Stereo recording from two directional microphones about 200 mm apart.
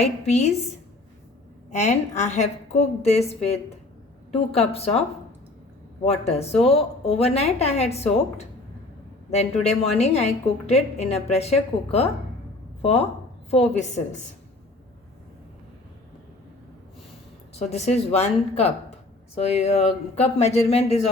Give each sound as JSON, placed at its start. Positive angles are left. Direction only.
{"t": 0.0, "sound": "a woman's voice", "side_deg": 35}
{"t": 1.7, "sound": "a woman's voice", "side_deg": 35}
{"t": 6.1, "sound": "a woman's voice", "side_deg": 30}
{"t": 17.6, "sound": "a woman's voice", "side_deg": 35}